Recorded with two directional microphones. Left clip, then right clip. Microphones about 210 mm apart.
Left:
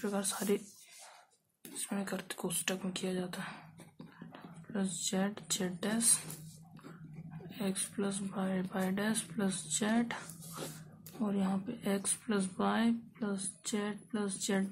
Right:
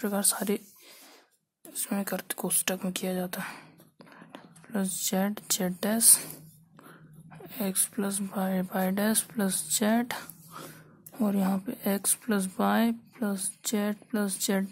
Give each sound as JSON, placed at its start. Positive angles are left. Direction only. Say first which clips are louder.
{"t": 0.0, "sound": "speech", "louder": "right 6 dB", "side_deg": -50}
{"t": 1.8, "sound": "speech", "louder": "right 7 dB", "side_deg": -50}
{"t": 7.4, "sound": "speech", "louder": "right 6 dB", "side_deg": -55}